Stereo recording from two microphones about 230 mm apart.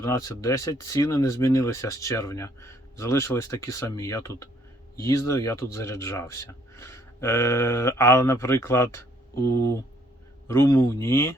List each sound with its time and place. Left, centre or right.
0.0 s speech: centre